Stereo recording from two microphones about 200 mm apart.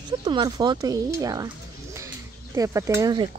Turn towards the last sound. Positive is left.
turn(degrees=-20)  # may be behind; listen again after turning